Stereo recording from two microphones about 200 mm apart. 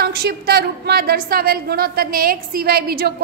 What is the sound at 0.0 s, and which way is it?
A woman's voice, 50° right (ahead or behind).